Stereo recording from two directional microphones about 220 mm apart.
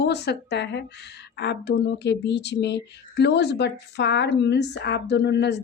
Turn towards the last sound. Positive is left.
turn(degrees=50)  # may be behind; listen again after turning